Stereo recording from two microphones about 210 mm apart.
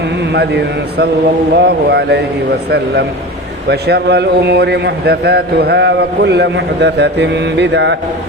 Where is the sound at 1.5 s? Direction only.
50° right (ahead or behind).